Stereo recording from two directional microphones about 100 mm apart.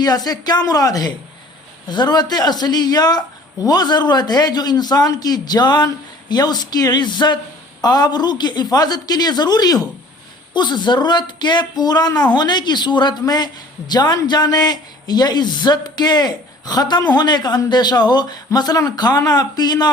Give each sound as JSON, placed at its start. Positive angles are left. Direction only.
{"t": 0.0, "sound": "speech", "side_deg": 40}